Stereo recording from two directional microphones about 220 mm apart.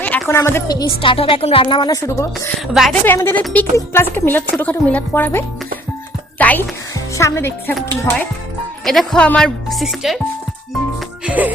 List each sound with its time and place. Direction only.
0.0 s a woman's voice: 10° left (ahead or behind)
2.7 s speech: centre (ahead or behind)
3.1 s speech: 10° left (ahead or behind)
6.4 s music: 5° left (ahead or behind)
7.2 s speech: 15° left (ahead or behind)
8.8 s speech: centre (ahead or behind)
11.3 s music: 5° right (ahead or behind)